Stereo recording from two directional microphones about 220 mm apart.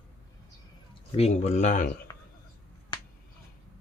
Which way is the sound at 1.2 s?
30° left (ahead or behind).